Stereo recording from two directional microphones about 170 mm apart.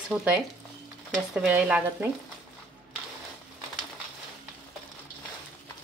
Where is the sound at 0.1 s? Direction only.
10° right (ahead or behind).